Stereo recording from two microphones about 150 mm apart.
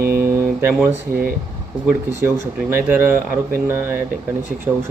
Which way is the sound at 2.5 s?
15° right (ahead or behind).